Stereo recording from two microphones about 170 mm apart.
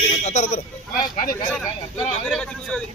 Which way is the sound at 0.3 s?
45° left (ahead or behind).